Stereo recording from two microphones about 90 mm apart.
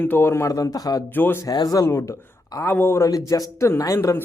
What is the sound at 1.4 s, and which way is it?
Speech, 40° left (ahead or behind).